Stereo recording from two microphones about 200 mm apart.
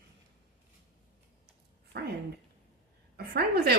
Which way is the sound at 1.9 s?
55° right (ahead or behind).